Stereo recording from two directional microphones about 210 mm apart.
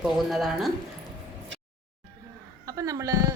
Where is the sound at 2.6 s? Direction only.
15° right (ahead or behind).